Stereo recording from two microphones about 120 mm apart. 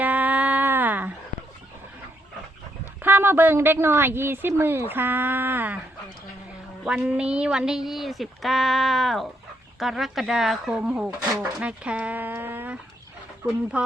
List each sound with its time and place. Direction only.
0.0 s a sound: 15° right (ahead or behind)
2.8 s speech: 15° right (ahead or behind)
6.8 s speech: 5° right (ahead or behind)